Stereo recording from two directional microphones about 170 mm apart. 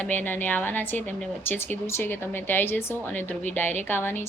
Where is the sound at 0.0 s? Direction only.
10° left (ahead or behind).